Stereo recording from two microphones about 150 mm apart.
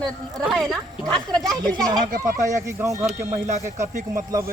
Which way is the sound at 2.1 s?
75° right (ahead or behind).